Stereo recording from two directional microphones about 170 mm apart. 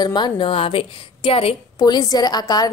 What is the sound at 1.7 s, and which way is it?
Speech, 25° left (ahead or behind).